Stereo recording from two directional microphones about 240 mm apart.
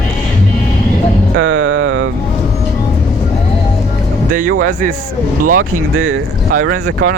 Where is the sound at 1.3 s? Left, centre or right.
Right.